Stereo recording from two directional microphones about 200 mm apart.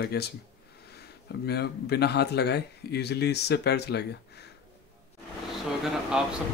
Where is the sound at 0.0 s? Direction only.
55° left (ahead or behind).